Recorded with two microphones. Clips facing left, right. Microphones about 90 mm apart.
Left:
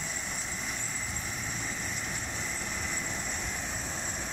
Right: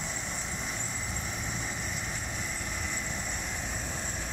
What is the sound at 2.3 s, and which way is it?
Vehicle, 5° right (ahead or behind).